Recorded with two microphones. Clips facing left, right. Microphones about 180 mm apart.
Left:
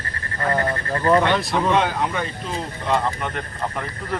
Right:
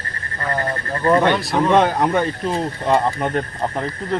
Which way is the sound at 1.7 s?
50° right (ahead or behind).